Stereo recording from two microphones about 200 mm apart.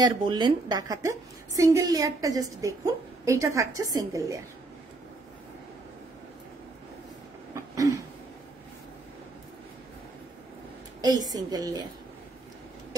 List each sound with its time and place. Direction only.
0.0 s a woman's voice: 20° right (ahead or behind)
7.5 s a sound: 15° right (ahead or behind)
11.0 s speech: 20° right (ahead or behind)